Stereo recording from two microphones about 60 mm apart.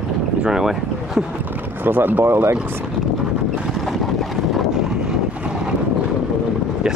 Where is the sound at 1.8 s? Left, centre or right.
Right.